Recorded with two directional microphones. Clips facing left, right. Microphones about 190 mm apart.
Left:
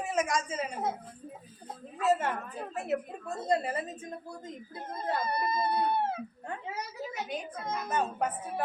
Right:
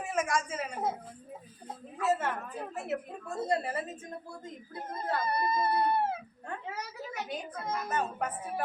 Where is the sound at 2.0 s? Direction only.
15° left (ahead or behind).